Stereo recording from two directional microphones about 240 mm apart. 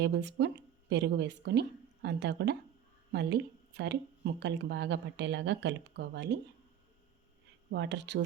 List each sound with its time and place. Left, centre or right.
0.0 s speech: right
7.7 s speech: right